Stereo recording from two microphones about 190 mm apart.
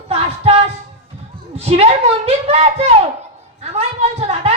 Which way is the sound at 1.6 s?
35° right (ahead or behind).